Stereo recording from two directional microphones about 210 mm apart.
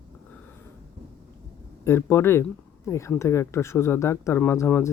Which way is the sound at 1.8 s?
10° left (ahead or behind).